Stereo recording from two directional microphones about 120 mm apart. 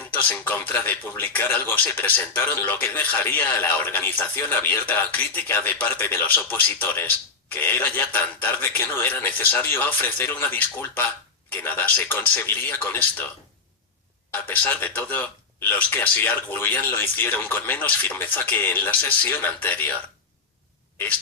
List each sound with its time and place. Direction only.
0.1 s speech: 15° left (ahead or behind)
14.3 s speech: 15° left (ahead or behind)